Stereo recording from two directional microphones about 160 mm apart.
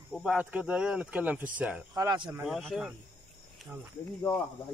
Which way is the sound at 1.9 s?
25° right (ahead or behind).